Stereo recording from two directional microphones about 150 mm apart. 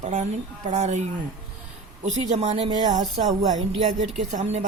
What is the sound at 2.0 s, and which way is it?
A woman's voice, 50° right (ahead or behind).